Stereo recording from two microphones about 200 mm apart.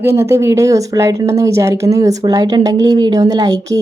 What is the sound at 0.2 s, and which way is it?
Speech, 15° right (ahead or behind).